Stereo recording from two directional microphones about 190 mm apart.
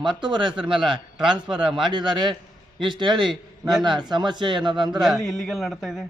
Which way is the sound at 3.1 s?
Centre (ahead or behind).